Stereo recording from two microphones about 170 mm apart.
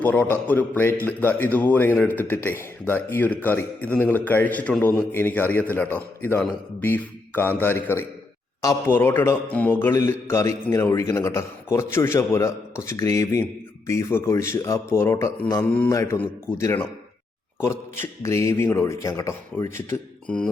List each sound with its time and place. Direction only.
0.0 s a man's voice: 10° left (ahead or behind)